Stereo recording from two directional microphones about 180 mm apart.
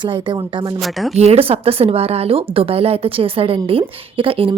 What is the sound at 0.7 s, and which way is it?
Speech, centre (ahead or behind).